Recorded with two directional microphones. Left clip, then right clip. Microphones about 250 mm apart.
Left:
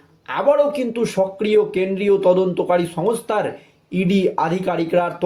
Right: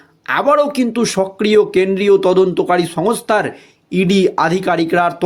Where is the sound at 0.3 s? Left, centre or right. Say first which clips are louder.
Right 3 dB; right.